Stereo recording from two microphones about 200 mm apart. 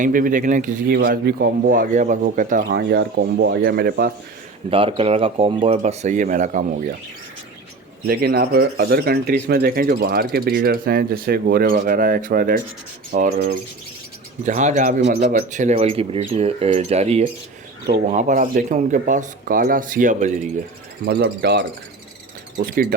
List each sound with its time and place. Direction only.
0.0 s speech: 40° right (ahead or behind)
2.6 s speech: 55° right (ahead or behind)
4.7 s speech: 25° right (ahead or behind)
8.0 s speech: 50° right (ahead or behind)
21.0 s speech: 55° right (ahead or behind)